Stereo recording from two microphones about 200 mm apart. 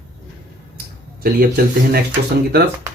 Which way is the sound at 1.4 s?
50° right (ahead or behind).